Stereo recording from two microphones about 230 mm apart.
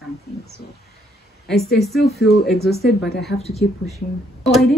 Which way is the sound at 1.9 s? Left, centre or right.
Left.